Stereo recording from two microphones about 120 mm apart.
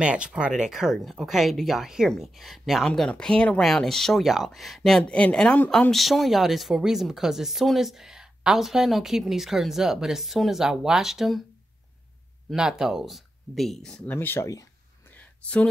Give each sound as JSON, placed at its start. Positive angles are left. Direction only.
{"t": 0.0, "sound": "speech", "side_deg": -10}
{"t": 12.4, "sound": "speech", "side_deg": -5}
{"t": 14.1, "sound": "speech", "side_deg": 20}
{"t": 15.0, "sound": "a sound", "side_deg": 10}